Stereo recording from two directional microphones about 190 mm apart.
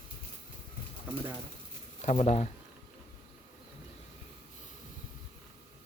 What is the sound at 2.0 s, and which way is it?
Speech, 35° left (ahead or behind).